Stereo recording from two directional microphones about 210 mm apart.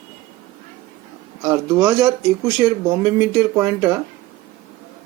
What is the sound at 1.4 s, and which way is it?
Speech, 15° right (ahead or behind).